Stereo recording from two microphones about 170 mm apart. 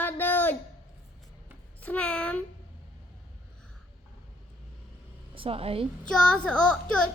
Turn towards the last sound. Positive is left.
turn(degrees=5)  # may be behind; listen again after turning